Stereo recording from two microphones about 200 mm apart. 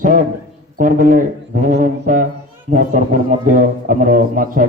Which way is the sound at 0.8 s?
40° right (ahead or behind).